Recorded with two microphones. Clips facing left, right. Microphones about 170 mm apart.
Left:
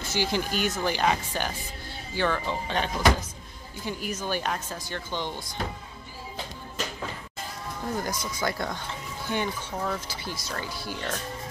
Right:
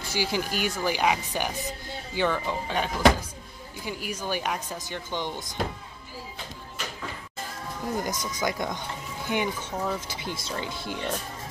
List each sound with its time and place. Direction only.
0.1 s speech: 10° right (ahead or behind)
8.0 s speech: 20° right (ahead or behind)